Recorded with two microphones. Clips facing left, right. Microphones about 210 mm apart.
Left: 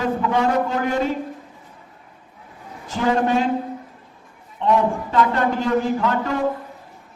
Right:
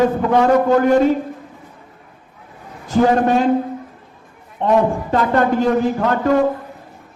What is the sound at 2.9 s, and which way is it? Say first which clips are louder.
Speech: right 5 dB; 45° right (ahead or behind).